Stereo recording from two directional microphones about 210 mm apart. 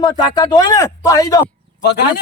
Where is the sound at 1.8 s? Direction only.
50° left (ahead or behind).